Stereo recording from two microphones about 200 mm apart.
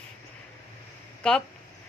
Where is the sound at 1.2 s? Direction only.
5° left (ahead or behind).